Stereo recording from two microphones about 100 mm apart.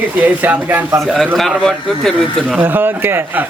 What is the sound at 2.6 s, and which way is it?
Speech, 20° right (ahead or behind).